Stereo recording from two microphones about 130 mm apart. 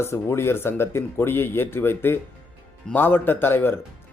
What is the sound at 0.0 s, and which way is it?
Speech, 20° left (ahead or behind).